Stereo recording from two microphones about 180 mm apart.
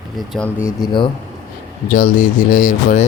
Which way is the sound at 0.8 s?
25° left (ahead or behind).